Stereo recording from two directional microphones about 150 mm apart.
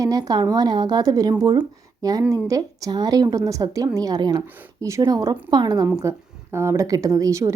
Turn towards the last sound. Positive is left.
turn(degrees=-20)  # may be behind; listen again after turning